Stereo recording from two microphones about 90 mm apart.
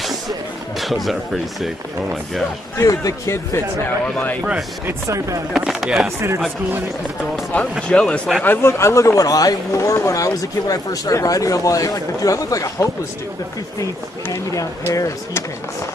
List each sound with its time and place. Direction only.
0.7 s speech: centre (ahead or behind)
2.8 s speech: 40° left (ahead or behind)
4.0 s a man's voice: 20° left (ahead or behind)
5.0 s speech: 35° right (ahead or behind)
5.5 s speech: 5° right (ahead or behind)
7.5 s a man's voice: 15° left (ahead or behind)
8.5 s speech: 30° left (ahead or behind)
14.2 s speech: 35° left (ahead or behind)